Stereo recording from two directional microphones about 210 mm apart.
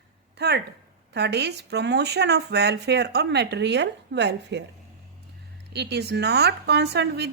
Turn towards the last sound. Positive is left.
turn(degrees=-55)  # may be behind; listen again after turning